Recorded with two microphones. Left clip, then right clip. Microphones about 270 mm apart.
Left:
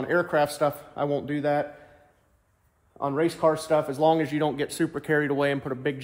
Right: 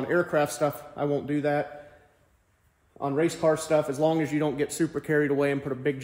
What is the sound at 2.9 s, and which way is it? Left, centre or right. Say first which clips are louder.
A man's voice: left 1 dB; centre.